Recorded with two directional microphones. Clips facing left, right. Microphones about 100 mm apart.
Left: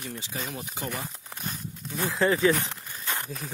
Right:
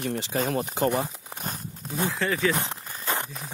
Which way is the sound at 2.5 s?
35° right (ahead or behind).